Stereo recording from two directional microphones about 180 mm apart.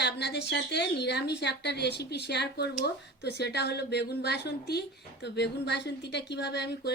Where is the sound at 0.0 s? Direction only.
70° left (ahead or behind).